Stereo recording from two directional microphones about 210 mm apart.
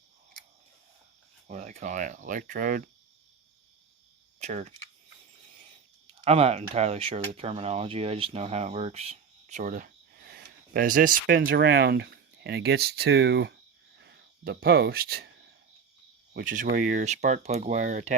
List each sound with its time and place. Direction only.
1.5 s speech: 35° right (ahead or behind)
4.4 s cricket: 30° right (ahead or behind)
6.2 s speech: 30° right (ahead or behind)
11.4 s speech: 50° right (ahead or behind)
16.3 s speech: 40° right (ahead or behind)